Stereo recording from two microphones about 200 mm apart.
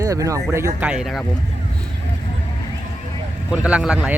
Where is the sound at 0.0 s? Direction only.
15° right (ahead or behind).